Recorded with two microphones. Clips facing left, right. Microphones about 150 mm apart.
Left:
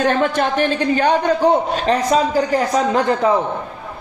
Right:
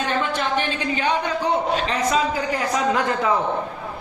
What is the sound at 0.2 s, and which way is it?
A woman's voice, 50° left (ahead or behind).